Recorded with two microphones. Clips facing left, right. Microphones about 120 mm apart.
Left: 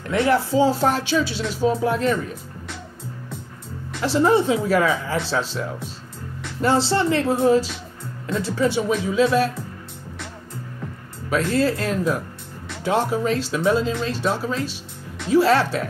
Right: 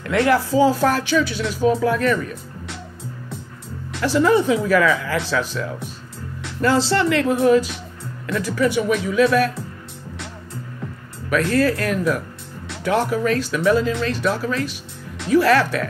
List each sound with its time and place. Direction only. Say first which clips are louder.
0.2 s speech: right 2 dB; 20° left (ahead or behind)
4.0 s speech: right 1 dB; 25° left (ahead or behind)
11.5 s speech: right 2 dB; 25° left (ahead or behind)